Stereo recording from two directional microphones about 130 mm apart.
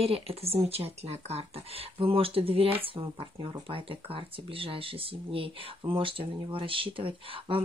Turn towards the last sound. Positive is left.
turn(degrees=-40)  # may be behind; listen again after turning